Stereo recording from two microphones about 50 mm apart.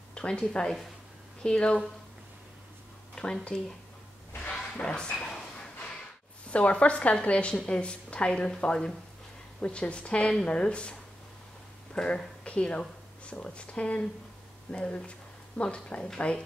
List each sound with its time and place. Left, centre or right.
0.1 s a woman's voice: centre
3.4 s speech: centre
4.5 s a sound: centre
6.5 s a woman's voice: left